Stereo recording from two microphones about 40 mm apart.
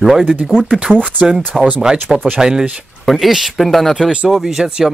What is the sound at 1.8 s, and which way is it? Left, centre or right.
Speech, centre.